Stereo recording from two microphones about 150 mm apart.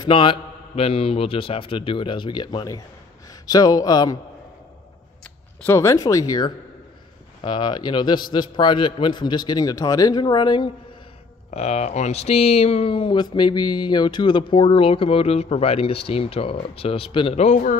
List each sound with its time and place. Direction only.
0.0 s a man's voice: 35° left (ahead or behind)
5.6 s a man's voice: 20° left (ahead or behind)
11.5 s speech: 45° left (ahead or behind)
17.4 s a man's voice: 55° left (ahead or behind)